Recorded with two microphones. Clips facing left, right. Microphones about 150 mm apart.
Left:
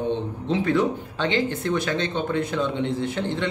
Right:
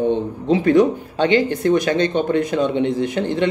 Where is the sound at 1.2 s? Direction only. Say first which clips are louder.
Right 8 dB; 55° right (ahead or behind).